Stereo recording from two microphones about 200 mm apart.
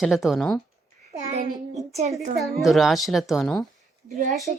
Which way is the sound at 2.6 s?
Centre (ahead or behind).